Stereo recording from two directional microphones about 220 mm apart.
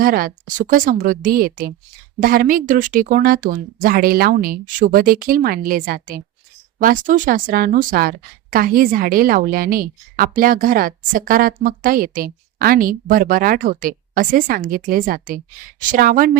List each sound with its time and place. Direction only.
0.0 s a woman's voice: 40° right (ahead or behind)